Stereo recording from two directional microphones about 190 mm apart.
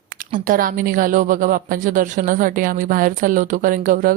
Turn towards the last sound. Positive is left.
turn(degrees=-45)  # may be behind; listen again after turning